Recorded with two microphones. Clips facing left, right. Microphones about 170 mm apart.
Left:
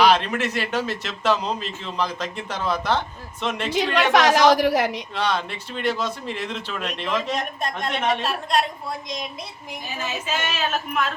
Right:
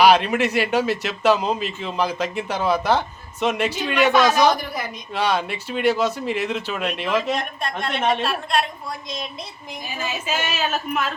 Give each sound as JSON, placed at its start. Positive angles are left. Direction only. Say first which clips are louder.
{"t": 0.0, "sound": "speech", "louder": "right 3 dB", "side_deg": -10}
{"t": 3.8, "sound": "a woman's voice", "louder": "left 3 dB", "side_deg": 80}
{"t": 4.1, "sound": "a woman's voice", "louder": "left 2 dB", "side_deg": 90}
{"t": 5.1, "sound": "speech", "louder": "right 3 dB", "side_deg": -10}
{"t": 7.6, "sound": "a woman's voice", "louder": "right 1 dB", "side_deg": 40}
{"t": 9.0, "sound": "a woman's voice", "louder": "even", "side_deg": 15}
{"t": 10.0, "sound": "speech", "louder": "right 1 dB", "side_deg": -10}